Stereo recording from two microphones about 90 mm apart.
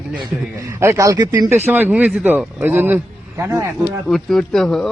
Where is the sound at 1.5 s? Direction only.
20° right (ahead or behind).